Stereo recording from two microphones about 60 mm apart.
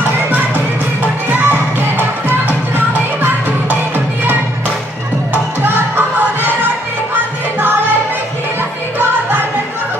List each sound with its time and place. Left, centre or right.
1.0 s music: right